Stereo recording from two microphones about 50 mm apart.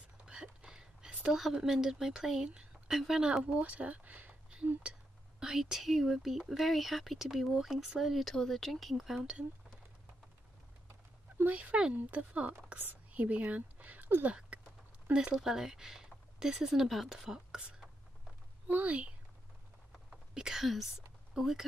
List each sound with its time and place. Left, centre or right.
0.2 s a sound: centre
1.4 s a woman's voice: centre
3.4 s speech: right
5.4 s speech: centre
11.3 s speech: right
14.5 s a sound: right
15.3 s a woman's voice: centre
18.7 s speech: right
20.3 s a woman's voice: centre